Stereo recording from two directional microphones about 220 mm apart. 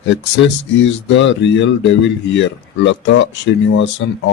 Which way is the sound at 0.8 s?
55° left (ahead or behind).